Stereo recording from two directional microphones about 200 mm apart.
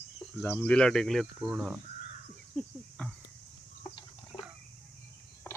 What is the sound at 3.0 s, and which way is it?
Cricket, 10° left (ahead or behind).